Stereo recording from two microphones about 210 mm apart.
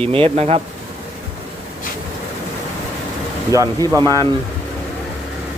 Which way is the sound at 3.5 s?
15° right (ahead or behind).